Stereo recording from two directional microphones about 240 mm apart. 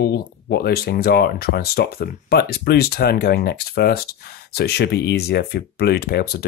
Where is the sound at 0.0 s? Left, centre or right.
Left.